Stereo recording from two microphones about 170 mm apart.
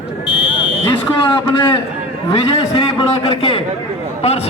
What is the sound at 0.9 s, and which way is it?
A man's voice, 30° left (ahead or behind).